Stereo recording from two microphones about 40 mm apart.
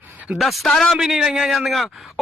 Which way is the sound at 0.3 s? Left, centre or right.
Centre.